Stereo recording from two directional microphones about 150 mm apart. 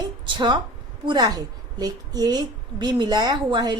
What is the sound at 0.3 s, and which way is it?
A woman's voice, 30° right (ahead or behind).